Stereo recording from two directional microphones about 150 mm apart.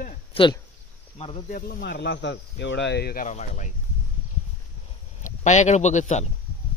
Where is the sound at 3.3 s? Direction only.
55° left (ahead or behind).